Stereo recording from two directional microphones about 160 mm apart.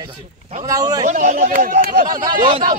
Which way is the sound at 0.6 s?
20° right (ahead or behind).